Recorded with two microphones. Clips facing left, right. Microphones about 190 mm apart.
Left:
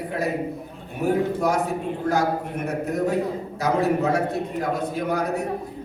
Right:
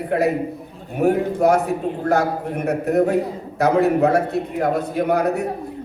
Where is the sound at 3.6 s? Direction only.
60° right (ahead or behind).